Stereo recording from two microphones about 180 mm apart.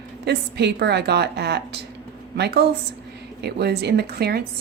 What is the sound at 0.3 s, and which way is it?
A woman's voice, 65° right (ahead or behind).